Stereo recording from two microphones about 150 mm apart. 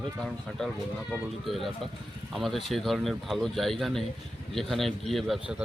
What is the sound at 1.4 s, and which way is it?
A man's voice, centre (ahead or behind).